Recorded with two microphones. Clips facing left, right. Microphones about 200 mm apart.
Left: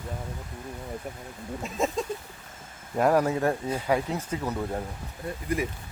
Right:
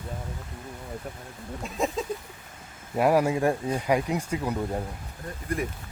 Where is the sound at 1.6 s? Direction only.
Centre (ahead or behind).